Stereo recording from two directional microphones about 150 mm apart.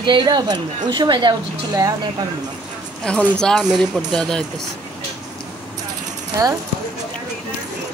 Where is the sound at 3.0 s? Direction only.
5° left (ahead or behind).